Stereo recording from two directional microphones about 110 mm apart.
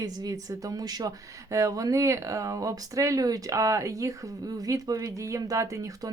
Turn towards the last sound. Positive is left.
turn(degrees=-30)  # may be behind; listen again after turning